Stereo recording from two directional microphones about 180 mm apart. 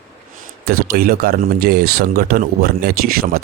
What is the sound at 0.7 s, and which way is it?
Speech, 55° right (ahead or behind).